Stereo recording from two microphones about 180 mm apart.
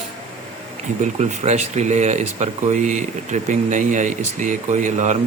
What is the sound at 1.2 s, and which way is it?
Speech, 40° right (ahead or behind).